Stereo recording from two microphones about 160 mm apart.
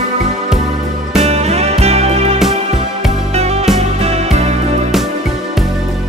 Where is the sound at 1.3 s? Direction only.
40° right (ahead or behind).